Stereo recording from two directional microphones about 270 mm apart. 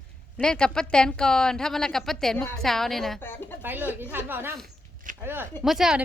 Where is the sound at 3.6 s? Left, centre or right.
Centre.